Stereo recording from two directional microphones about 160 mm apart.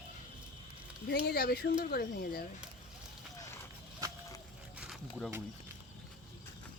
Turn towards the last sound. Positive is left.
turn(degrees=0)  # may be behind; listen again after turning